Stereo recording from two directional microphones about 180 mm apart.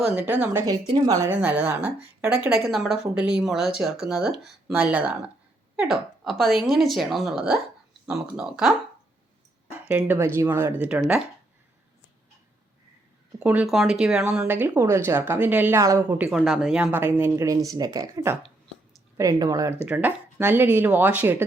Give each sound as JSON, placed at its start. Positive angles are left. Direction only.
{"t": 0.0, "sound": "speech", "side_deg": -10}
{"t": 0.6, "sound": "a woman's voice", "side_deg": -20}
{"t": 13.4, "sound": "speech", "side_deg": -5}
{"t": 19.8, "sound": "speech", "side_deg": -10}